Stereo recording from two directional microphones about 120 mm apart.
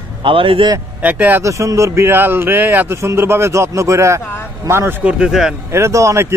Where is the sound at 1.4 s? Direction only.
25° right (ahead or behind).